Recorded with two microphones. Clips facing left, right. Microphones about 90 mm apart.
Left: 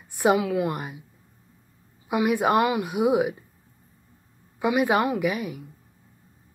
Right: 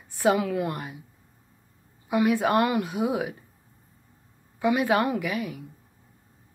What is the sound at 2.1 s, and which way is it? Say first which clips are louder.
Speech: left 1 dB; 15° left (ahead or behind).